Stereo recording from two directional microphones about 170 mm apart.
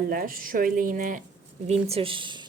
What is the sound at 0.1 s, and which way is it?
Speech, 55° right (ahead or behind).